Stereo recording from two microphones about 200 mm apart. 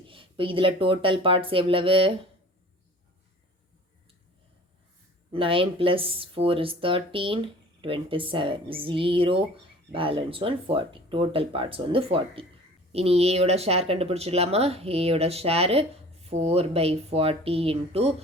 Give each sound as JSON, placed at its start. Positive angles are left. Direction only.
{"t": 0.1, "sound": "speech", "side_deg": -25}
{"t": 5.3, "sound": "speech", "side_deg": -25}